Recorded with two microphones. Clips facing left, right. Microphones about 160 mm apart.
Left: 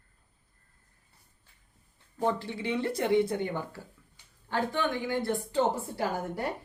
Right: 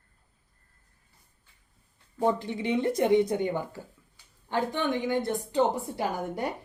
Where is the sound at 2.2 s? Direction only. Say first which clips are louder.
Right 3 dB; 15° right (ahead or behind).